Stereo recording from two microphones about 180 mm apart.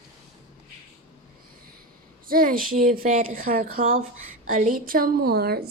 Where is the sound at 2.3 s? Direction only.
50° right (ahead or behind).